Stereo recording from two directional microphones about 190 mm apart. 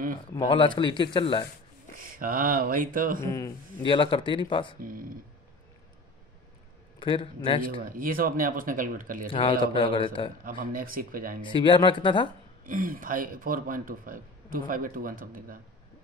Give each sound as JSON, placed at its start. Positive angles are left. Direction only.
{"t": 0.3, "sound": "a man's voice", "side_deg": 25}
{"t": 2.0, "sound": "speech", "side_deg": -45}
{"t": 3.2, "sound": "speech", "side_deg": 15}
{"t": 3.8, "sound": "a man's voice", "side_deg": 25}
{"t": 4.7, "sound": "speech", "side_deg": -45}
{"t": 7.0, "sound": "a man's voice", "side_deg": 25}
{"t": 7.8, "sound": "speech", "side_deg": -45}
{"t": 9.3, "sound": "a man's voice", "side_deg": 25}
{"t": 10.4, "sound": "speech", "side_deg": -45}
{"t": 11.4, "sound": "a man's voice", "side_deg": 25}
{"t": 12.6, "sound": "speech", "side_deg": -45}